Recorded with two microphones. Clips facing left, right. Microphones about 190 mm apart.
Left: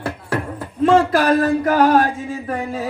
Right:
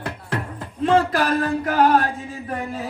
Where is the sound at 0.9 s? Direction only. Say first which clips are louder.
Left 4 dB; 40° left (ahead or behind).